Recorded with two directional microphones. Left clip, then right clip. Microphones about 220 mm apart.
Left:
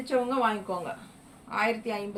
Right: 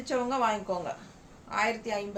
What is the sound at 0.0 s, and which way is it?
A woman's voice, 20° right (ahead or behind).